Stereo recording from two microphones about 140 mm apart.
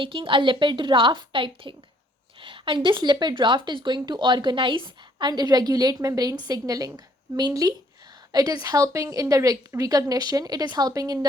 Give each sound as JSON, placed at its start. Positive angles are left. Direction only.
{"t": 0.0, "sound": "a woman's voice", "side_deg": -35}